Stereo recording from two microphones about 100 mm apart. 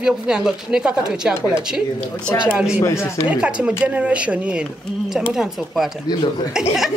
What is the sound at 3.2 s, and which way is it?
A man's voice, 10° right (ahead or behind).